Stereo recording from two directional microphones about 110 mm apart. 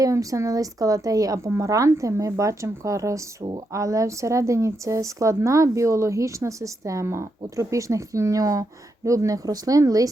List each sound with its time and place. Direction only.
0.0 s speech: 30° right (ahead or behind)